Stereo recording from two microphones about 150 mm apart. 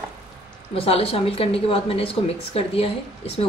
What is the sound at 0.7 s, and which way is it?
Speech, 40° left (ahead or behind).